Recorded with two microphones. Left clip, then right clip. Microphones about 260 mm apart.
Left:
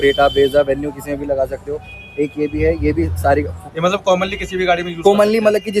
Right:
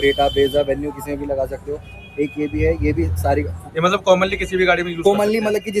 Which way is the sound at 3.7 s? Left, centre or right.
Centre.